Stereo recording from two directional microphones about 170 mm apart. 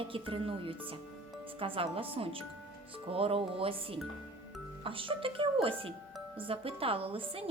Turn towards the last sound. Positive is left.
turn(degrees=-35)  # may be behind; listen again after turning